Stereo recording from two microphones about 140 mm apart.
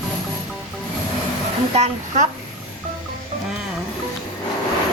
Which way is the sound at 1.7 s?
50° right (ahead or behind).